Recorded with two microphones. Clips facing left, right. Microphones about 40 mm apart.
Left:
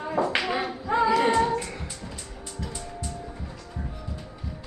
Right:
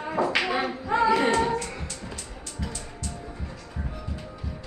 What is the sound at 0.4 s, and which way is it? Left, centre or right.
Singing, centre.